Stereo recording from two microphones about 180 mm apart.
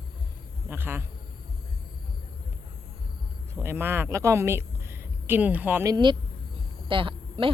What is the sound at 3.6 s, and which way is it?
Speech, 10° right (ahead or behind).